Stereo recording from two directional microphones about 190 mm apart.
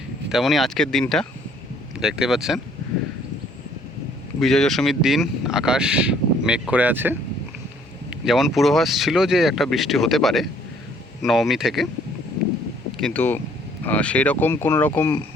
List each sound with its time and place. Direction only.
0.3 s speech: centre (ahead or behind)
4.4 s speech: centre (ahead or behind)
13.0 s speech: 5° left (ahead or behind)